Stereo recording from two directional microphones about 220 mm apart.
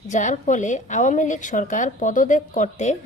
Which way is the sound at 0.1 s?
35° left (ahead or behind).